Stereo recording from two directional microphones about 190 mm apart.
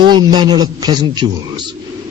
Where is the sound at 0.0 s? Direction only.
25° right (ahead or behind).